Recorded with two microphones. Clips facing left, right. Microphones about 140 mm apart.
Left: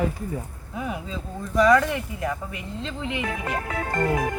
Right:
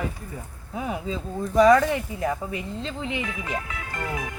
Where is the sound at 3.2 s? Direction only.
45° left (ahead or behind).